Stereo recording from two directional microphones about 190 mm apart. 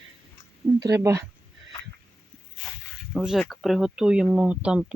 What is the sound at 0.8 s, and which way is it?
Speech, 15° right (ahead or behind).